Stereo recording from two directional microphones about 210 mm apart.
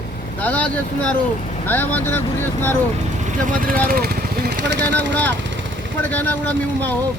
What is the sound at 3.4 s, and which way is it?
Speech, 40° right (ahead or behind).